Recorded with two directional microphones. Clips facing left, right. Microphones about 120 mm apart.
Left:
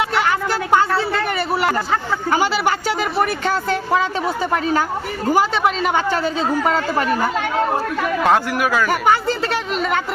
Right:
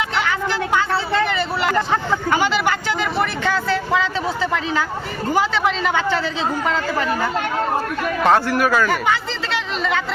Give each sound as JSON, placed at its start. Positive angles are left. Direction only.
{"t": 2.3, "sound": "speech", "side_deg": 40}
{"t": 5.9, "sound": "speech", "side_deg": 45}
{"t": 8.2, "sound": "a man's voice", "side_deg": 10}
{"t": 9.0, "sound": "speech", "side_deg": 45}